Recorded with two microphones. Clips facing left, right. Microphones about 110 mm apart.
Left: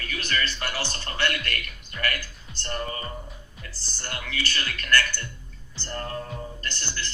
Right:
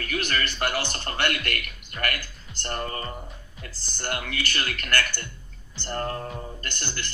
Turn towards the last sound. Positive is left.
turn(degrees=-55)  # may be behind; listen again after turning